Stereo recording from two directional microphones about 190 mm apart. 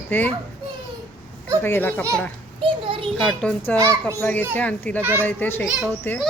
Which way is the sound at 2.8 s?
30° right (ahead or behind).